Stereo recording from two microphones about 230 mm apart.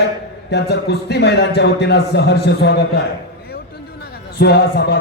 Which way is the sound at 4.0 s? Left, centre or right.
Left.